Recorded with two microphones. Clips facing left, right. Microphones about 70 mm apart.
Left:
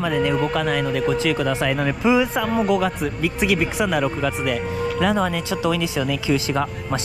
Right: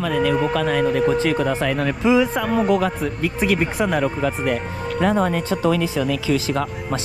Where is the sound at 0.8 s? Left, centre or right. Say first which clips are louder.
Right 3 dB; right.